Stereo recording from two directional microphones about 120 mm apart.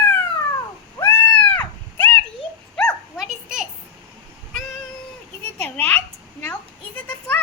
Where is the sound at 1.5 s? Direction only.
20° left (ahead or behind).